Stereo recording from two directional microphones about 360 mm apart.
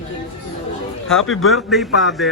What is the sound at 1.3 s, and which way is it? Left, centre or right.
Speech, left.